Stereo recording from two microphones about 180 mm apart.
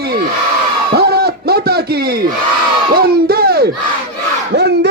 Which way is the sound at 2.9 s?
55° right (ahead or behind).